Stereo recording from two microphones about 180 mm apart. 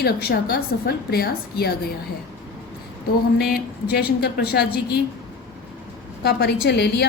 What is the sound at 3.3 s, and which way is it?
A woman's voice, 60° left (ahead or behind).